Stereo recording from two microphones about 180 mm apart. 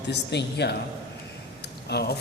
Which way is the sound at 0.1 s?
70° left (ahead or behind).